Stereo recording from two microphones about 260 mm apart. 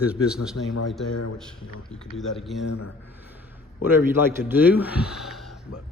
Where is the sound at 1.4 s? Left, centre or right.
Centre.